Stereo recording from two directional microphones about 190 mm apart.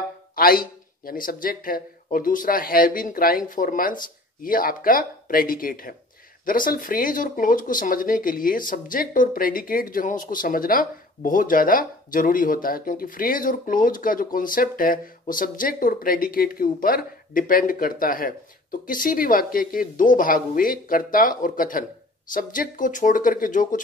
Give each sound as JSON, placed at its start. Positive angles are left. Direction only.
{"t": 0.4, "sound": "speech", "side_deg": 50}